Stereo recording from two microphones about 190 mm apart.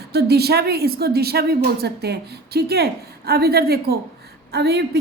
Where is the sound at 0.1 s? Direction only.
60° right (ahead or behind).